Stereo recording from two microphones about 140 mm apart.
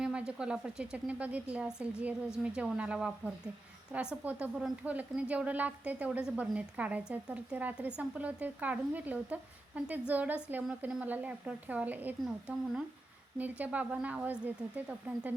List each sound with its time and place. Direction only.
0.0 s a woman's voice: 5° right (ahead or behind)